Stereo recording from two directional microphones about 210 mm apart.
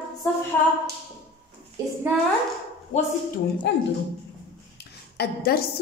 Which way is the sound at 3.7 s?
55° left (ahead or behind).